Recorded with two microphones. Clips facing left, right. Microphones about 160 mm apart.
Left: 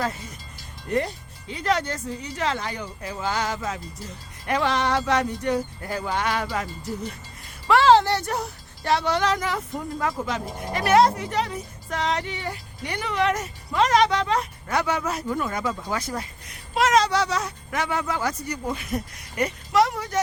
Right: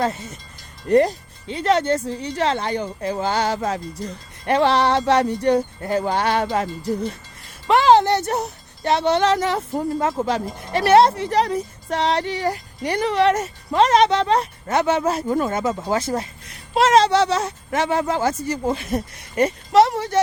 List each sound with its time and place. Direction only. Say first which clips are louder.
0.9 s speech: right 9 dB; 40° right (ahead or behind)
1.5 s speech: right 6 dB; 25° right (ahead or behind)
7.7 s speech: right 2 dB; 20° right (ahead or behind)